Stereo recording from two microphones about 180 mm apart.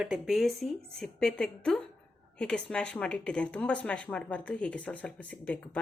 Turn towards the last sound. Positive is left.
turn(degrees=5)  # may be behind; listen again after turning